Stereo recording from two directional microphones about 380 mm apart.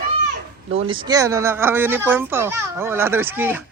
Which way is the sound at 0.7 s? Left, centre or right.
Centre.